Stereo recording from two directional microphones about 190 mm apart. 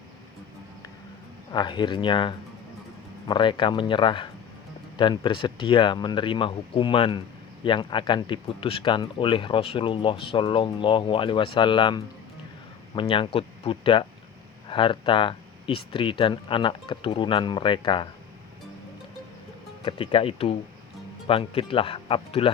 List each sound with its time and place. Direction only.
1.5 s speech: 25° left (ahead or behind)
19.8 s speech: 30° left (ahead or behind)